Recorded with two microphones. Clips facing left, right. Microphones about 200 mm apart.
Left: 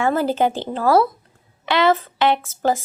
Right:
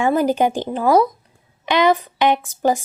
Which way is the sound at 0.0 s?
15° right (ahead or behind).